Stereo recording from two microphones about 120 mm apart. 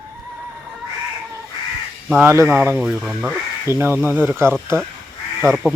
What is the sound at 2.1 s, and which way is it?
Speech, 20° right (ahead or behind).